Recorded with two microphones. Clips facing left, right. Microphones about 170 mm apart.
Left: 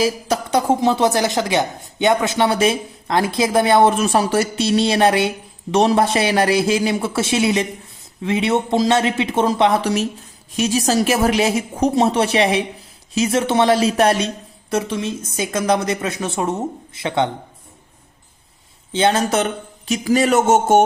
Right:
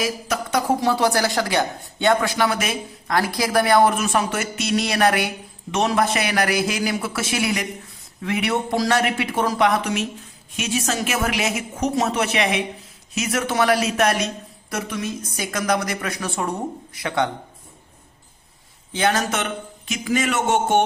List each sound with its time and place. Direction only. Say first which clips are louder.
0.0 s a woman's voice: left 5 dB; 30° left (ahead or behind)
18.9 s a woman's voice: left 5 dB; 25° left (ahead or behind)